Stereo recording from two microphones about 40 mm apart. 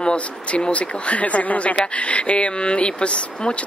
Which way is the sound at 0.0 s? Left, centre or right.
Left.